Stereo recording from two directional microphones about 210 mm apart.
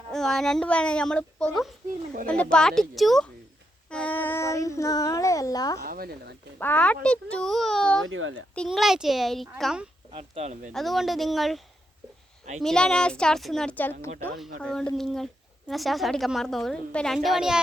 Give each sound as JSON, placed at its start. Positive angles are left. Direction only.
{"t": 0.1, "sound": "speech", "side_deg": 0}
{"t": 5.8, "sound": "speech", "side_deg": -45}
{"t": 6.6, "sound": "speech", "side_deg": 10}
{"t": 8.0, "sound": "speech", "side_deg": -70}
{"t": 8.5, "sound": "speech", "side_deg": 0}
{"t": 10.1, "sound": "speech", "side_deg": -30}
{"t": 10.7, "sound": "speech", "side_deg": 0}
{"t": 12.6, "sound": "speech", "side_deg": 5}